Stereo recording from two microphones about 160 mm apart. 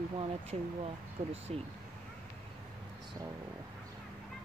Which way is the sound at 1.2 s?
40° right (ahead or behind).